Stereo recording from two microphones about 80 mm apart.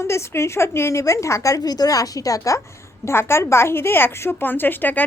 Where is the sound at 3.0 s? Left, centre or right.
Left.